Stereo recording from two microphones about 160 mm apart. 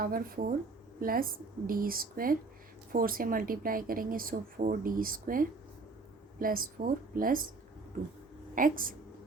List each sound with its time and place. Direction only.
0.0 s speech: 65° right (ahead or behind)
8.5 s speech: 60° right (ahead or behind)